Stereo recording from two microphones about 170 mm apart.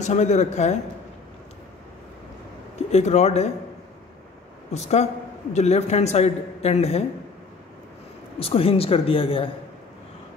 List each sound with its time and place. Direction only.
0.0 s speech: 45° left (ahead or behind)
2.9 s a man's voice: 40° left (ahead or behind)
4.7 s a man's voice: 40° left (ahead or behind)
8.4 s a man's voice: 35° left (ahead or behind)